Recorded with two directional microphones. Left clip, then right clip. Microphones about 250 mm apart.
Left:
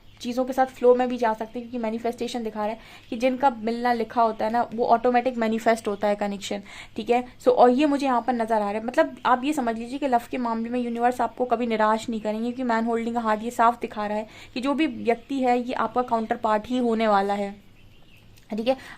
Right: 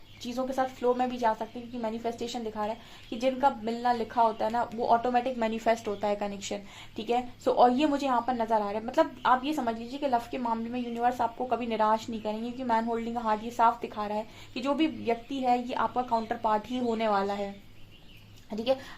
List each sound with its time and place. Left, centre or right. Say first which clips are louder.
0.2 s a woman's voice: left 6 dB; left
18.5 s a woman's voice: left 4 dB; left